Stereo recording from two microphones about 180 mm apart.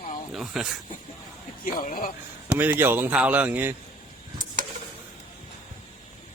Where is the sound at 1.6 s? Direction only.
50° left (ahead or behind).